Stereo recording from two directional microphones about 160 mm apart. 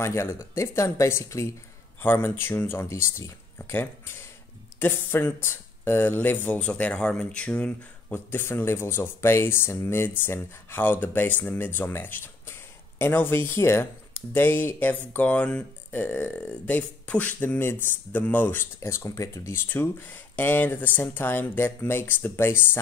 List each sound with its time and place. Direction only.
0.0 s speech: 15° left (ahead or behind)